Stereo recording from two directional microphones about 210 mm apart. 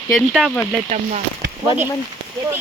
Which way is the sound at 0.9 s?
35° right (ahead or behind).